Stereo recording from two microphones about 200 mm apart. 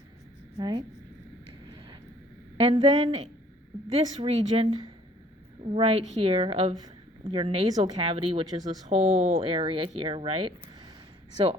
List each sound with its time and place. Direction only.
0.5 s speech: 20° right (ahead or behind)
2.6 s speech: 30° right (ahead or behind)